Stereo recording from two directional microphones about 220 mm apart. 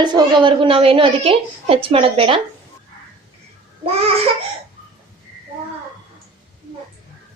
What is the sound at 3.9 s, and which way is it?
Babbling, 30° right (ahead or behind).